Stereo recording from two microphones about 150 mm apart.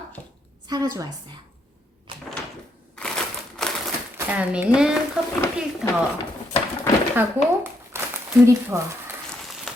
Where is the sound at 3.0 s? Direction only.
5° left (ahead or behind).